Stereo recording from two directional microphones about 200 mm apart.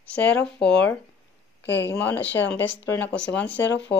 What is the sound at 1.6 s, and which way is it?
Speech, 60° left (ahead or behind).